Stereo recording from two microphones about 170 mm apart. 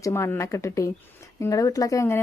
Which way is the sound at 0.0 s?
15° left (ahead or behind).